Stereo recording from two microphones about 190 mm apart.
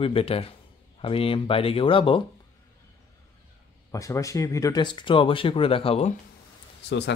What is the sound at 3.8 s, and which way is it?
Speech, 15° left (ahead or behind).